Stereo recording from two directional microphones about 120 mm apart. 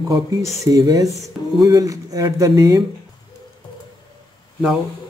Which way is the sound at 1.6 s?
30° right (ahead or behind).